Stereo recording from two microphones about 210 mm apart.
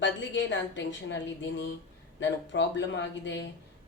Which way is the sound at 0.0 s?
60° left (ahead or behind).